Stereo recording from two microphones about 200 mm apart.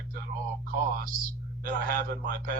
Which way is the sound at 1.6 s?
45° right (ahead or behind).